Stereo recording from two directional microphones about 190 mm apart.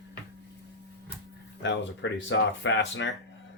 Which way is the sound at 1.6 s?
75° left (ahead or behind).